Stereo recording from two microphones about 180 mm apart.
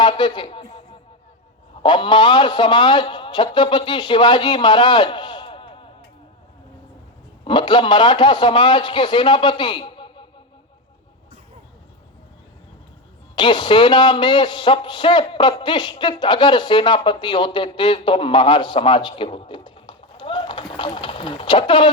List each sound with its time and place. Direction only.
0.0 s a sound: 25° left (ahead or behind)
1.8 s a man's voice: 25° left (ahead or behind)
7.4 s a man's voice: 25° left (ahead or behind)
13.3 s a man's voice: 25° left (ahead or behind)